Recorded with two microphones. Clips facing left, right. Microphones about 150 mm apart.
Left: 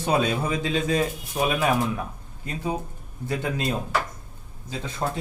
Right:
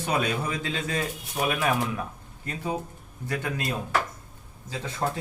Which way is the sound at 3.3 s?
25° left (ahead or behind).